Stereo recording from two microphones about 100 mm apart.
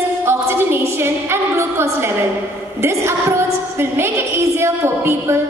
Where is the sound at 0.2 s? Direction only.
25° right (ahead or behind).